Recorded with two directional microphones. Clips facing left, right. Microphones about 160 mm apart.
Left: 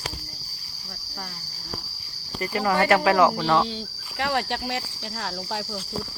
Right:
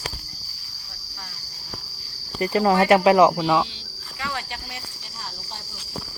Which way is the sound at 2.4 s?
25° right (ahead or behind).